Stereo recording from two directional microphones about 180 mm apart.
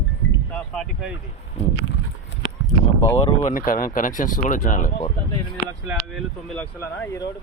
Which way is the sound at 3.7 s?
50° left (ahead or behind).